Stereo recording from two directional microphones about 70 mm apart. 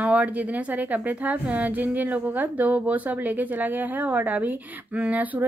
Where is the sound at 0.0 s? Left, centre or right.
Centre.